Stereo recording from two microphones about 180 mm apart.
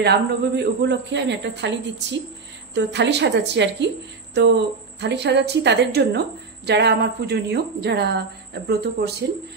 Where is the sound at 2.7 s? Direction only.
75° right (ahead or behind).